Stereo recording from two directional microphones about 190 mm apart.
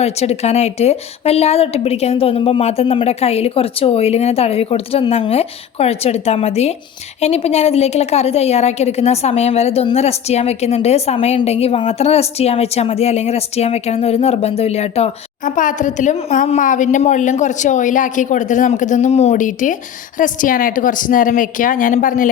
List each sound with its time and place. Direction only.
0.0 s a woman's voice: 35° left (ahead or behind)